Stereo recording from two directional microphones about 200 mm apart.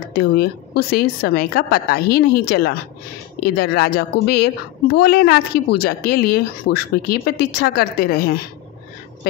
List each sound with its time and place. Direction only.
0.1 s speech: 50° left (ahead or behind)